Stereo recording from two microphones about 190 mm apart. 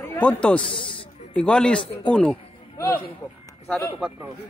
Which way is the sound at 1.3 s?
5° left (ahead or behind).